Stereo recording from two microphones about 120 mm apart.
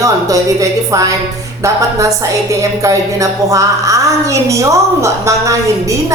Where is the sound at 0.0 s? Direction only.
30° right (ahead or behind).